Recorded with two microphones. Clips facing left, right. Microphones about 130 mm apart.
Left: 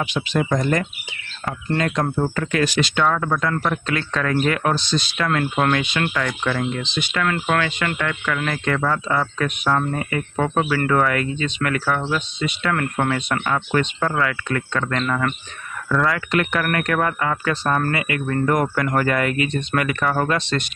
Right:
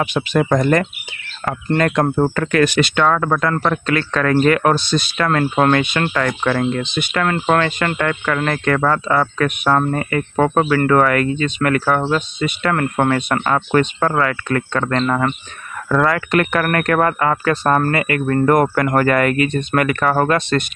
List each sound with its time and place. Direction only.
0.0 s speech: 50° right (ahead or behind)
0.4 s speech: 65° right (ahead or behind)
5.4 s speech: 45° right (ahead or behind)
7.3 s speech: 40° right (ahead or behind)
15.9 s speech: 50° right (ahead or behind)